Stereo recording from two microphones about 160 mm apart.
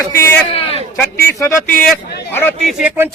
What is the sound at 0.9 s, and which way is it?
Speech, 15° left (ahead or behind).